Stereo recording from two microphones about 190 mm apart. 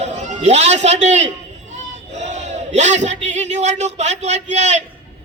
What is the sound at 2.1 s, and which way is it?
Speech, 35° right (ahead or behind).